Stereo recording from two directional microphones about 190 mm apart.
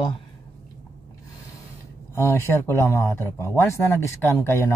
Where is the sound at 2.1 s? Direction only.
15° left (ahead or behind).